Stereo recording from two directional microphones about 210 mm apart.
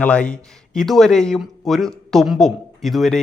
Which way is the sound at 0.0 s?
5° left (ahead or behind).